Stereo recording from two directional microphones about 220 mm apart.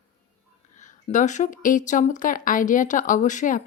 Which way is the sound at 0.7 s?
35° left (ahead or behind).